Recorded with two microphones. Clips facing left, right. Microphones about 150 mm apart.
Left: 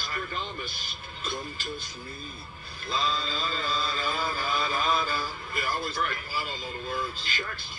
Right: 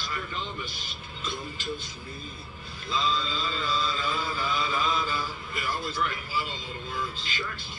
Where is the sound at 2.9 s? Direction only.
50° left (ahead or behind).